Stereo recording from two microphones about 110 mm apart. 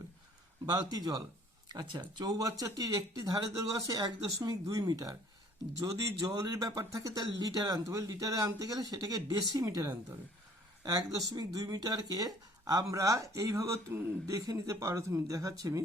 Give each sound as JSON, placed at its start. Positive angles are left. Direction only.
{"t": 0.6, "sound": "speech", "side_deg": -35}